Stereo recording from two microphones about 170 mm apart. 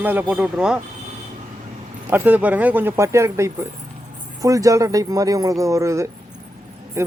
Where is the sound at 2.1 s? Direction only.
10° right (ahead or behind).